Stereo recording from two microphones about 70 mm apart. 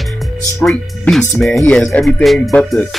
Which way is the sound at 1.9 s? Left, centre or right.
Centre.